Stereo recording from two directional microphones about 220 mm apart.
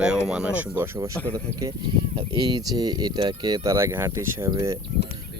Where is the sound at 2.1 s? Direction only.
20° right (ahead or behind).